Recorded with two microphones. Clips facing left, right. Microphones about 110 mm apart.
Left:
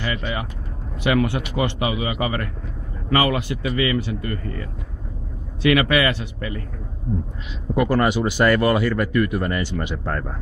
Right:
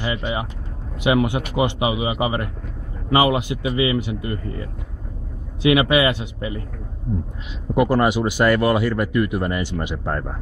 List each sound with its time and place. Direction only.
0.0 s a man's voice: 20° right (ahead or behind)
7.7 s speech: 15° right (ahead or behind)